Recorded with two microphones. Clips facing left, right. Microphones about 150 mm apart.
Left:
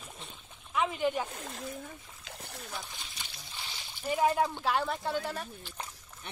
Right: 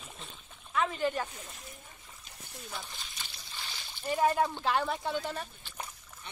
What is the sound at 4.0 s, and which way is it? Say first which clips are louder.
Speech: even; 10° left (ahead or behind).